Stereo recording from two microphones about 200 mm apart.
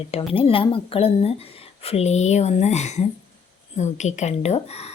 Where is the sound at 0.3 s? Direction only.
25° left (ahead or behind).